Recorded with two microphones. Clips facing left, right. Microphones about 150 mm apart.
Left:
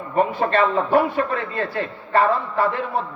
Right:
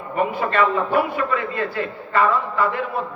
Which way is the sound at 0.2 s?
35° left (ahead or behind).